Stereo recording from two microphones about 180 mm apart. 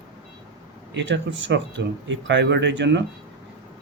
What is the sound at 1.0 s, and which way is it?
Speech, 90° right.